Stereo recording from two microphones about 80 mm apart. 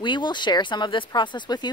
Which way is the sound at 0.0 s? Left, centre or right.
Left.